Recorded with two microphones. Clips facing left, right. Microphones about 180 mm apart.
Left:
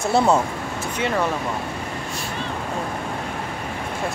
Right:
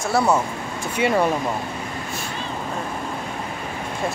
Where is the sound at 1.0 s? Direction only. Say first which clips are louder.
Right 4 dB; 10° right (ahead or behind).